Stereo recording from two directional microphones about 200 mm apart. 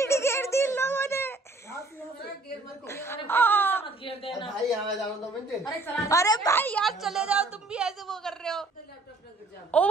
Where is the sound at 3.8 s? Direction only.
25° left (ahead or behind).